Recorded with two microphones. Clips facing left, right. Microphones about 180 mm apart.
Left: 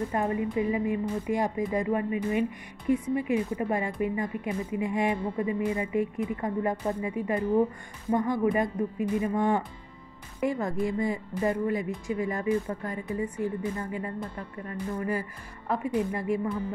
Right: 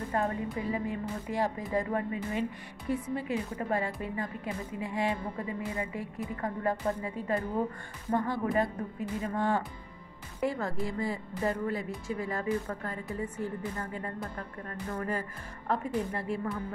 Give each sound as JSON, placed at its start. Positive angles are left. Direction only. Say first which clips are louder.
{"t": 0.1, "sound": "speech", "louder": "even", "side_deg": 15}